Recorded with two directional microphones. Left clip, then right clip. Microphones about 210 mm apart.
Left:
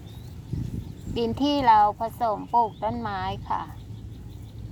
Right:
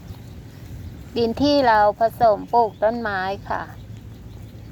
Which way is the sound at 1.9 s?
45° right (ahead or behind).